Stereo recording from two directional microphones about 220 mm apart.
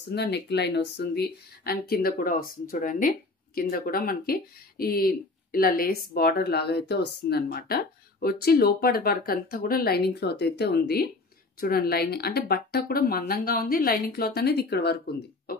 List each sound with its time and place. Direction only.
0.1 s speech: 50° left (ahead or behind)